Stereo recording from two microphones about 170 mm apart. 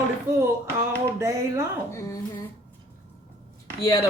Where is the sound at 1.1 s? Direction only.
15° right (ahead or behind).